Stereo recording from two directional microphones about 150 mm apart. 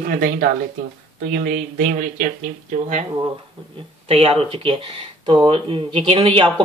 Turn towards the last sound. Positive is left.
turn(degrees=-35)  # may be behind; listen again after turning